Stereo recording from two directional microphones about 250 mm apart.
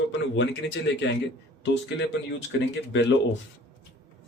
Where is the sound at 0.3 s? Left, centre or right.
Left.